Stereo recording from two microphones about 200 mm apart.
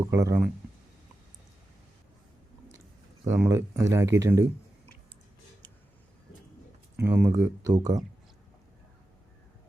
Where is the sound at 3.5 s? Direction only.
15° right (ahead or behind).